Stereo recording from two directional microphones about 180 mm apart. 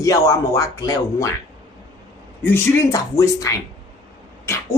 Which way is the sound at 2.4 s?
15° left (ahead or behind).